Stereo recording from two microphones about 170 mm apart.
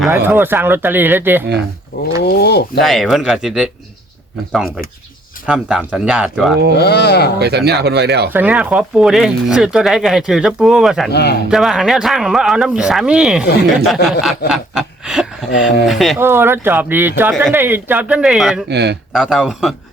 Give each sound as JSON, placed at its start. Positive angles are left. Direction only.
{"t": 0.1, "sound": "speech", "side_deg": -10}
{"t": 2.2, "sound": "speech", "side_deg": 70}
{"t": 2.8, "sound": "speech", "side_deg": 0}
{"t": 5.5, "sound": "speech", "side_deg": -5}
{"t": 6.7, "sound": "speech", "side_deg": 75}
{"t": 7.3, "sound": "speech", "side_deg": -75}
{"t": 8.3, "sound": "speech", "side_deg": -10}
{"t": 11.1, "sound": "speech", "side_deg": 75}
{"t": 11.4, "sound": "speech", "side_deg": 0}
{"t": 16.1, "sound": "speech", "side_deg": -15}
{"t": 18.7, "sound": "speech", "side_deg": -80}
{"t": 19.1, "sound": "speech", "side_deg": -5}